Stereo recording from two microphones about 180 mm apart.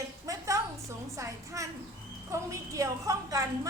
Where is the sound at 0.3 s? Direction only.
15° right (ahead or behind).